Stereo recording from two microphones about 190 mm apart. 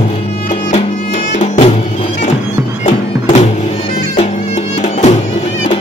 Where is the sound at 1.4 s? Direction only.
40° left (ahead or behind).